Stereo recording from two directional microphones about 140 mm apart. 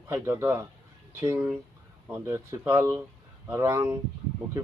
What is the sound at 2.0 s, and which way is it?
Speech, 15° right (ahead or behind).